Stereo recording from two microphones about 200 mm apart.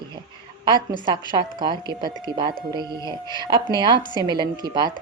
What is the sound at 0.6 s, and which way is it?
Speech, 20° right (ahead or behind).